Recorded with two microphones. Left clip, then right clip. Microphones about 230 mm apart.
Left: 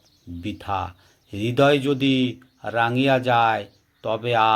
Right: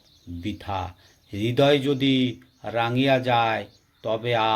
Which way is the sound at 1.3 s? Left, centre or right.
Left.